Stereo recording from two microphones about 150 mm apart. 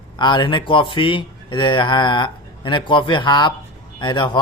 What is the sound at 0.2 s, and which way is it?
Speech, 30° left (ahead or behind).